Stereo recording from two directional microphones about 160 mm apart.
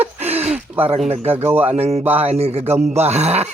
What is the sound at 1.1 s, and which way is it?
Speech, 40° right (ahead or behind).